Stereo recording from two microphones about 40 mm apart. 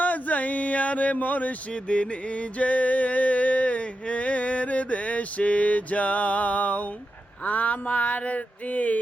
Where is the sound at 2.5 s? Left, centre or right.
Left.